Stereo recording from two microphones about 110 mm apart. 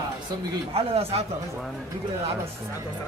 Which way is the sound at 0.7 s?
65° right (ahead or behind).